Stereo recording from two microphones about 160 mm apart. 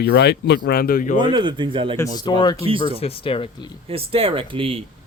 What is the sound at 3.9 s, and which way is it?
Speech, 35° right (ahead or behind).